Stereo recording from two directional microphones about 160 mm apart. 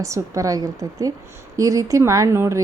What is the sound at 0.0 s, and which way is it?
Speech, 20° right (ahead or behind).